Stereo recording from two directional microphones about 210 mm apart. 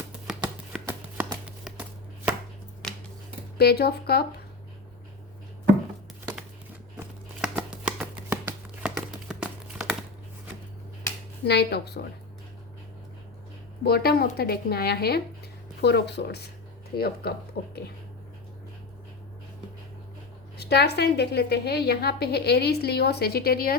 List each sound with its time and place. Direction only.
0.9 s a sound: 10° right (ahead or behind)
3.6 s a woman's voice: 50° left (ahead or behind)
7.4 s a sound: 5° right (ahead or behind)
11.4 s a woman's voice: 50° left (ahead or behind)
13.8 s a woman's voice: 45° left (ahead or behind)
20.6 s a woman's voice: 50° left (ahead or behind)